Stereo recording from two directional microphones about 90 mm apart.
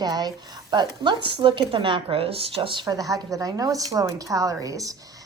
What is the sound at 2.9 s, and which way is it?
A woman's voice, 40° right (ahead or behind).